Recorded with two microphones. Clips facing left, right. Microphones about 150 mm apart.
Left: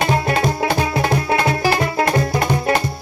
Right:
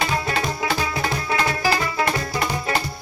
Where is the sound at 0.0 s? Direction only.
55° left (ahead or behind).